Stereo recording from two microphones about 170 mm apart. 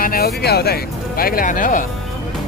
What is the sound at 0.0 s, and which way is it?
Speech, 60° left (ahead or behind).